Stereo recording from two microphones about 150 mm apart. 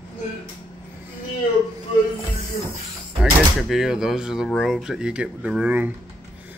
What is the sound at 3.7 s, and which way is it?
Speech, 5° right (ahead or behind).